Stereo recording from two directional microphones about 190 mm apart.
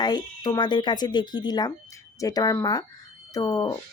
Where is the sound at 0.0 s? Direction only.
20° left (ahead or behind).